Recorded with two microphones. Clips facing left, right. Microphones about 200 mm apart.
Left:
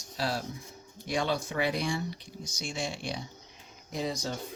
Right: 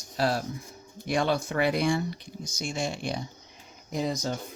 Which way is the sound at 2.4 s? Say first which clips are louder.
Right 4 dB; 45° right (ahead or behind).